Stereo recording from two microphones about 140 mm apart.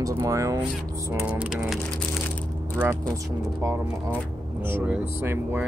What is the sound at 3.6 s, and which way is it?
Speech, 15° right (ahead or behind).